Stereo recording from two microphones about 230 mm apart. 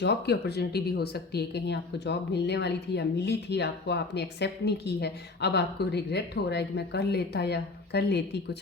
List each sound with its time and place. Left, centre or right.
0.0 s speech: left